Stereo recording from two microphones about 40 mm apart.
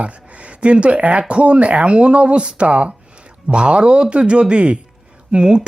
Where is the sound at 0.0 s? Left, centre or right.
Right.